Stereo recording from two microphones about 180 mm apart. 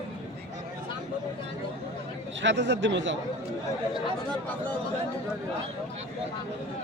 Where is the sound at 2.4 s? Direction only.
85° right.